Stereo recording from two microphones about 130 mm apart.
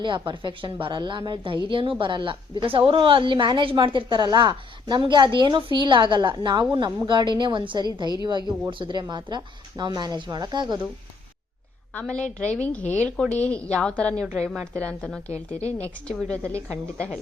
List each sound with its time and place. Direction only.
0.0 s a woman's voice: 35° right (ahead or behind)
11.9 s a woman's voice: 10° left (ahead or behind)
15.3 s a woman's voice: 55° left (ahead or behind)
15.8 s a woman's voice: 10° left (ahead or behind)